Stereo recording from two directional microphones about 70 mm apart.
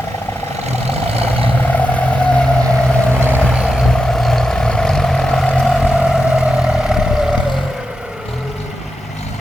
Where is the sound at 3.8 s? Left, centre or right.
Centre.